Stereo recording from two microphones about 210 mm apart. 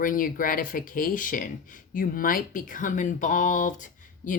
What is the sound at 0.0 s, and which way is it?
Speech, 40° left (ahead or behind).